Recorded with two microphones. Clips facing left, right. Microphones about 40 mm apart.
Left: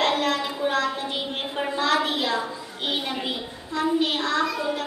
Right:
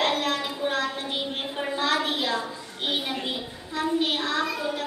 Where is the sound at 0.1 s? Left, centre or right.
Centre.